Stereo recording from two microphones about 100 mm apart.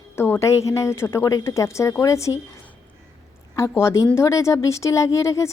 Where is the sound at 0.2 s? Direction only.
25° left (ahead or behind).